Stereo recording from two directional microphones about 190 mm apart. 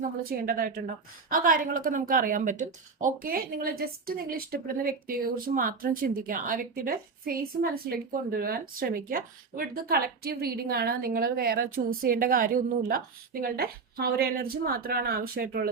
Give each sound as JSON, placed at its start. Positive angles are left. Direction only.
{"t": 0.2, "sound": "speech", "side_deg": -50}